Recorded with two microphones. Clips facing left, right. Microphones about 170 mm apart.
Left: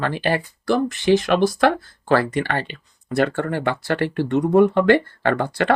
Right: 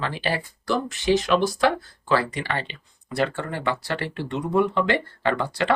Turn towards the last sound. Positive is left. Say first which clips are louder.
# left 3 dB
turn(degrees=50)  # may be behind; listen again after turning